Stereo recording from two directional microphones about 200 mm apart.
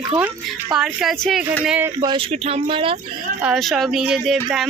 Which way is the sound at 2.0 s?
25° right (ahead or behind).